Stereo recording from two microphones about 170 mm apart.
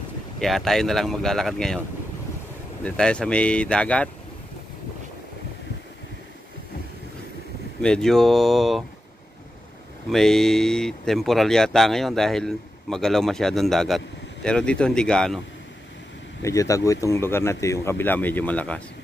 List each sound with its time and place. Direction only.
0.4 s speech: centre (ahead or behind)
2.8 s speech: 5° left (ahead or behind)
7.8 s speech: 5° left (ahead or behind)
10.1 s speech: 5° left (ahead or behind)
16.4 s speech: 20° left (ahead or behind)